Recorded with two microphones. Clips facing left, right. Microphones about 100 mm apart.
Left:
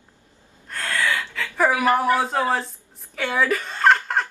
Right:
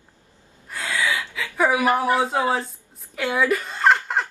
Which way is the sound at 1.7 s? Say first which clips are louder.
Even; 20° right (ahead or behind).